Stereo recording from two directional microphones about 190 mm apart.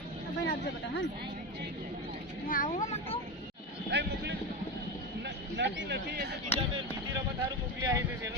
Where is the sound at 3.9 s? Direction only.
65° right (ahead or behind).